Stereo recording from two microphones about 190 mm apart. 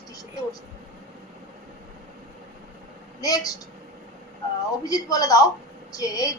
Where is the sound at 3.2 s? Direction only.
20° left (ahead or behind).